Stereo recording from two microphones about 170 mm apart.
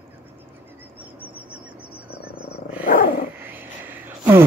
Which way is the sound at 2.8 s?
55° left (ahead or behind).